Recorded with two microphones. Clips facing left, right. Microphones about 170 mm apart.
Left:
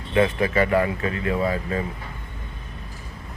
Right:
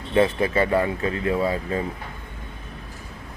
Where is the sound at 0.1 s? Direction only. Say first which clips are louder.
Right 1 dB; 30° right (ahead or behind).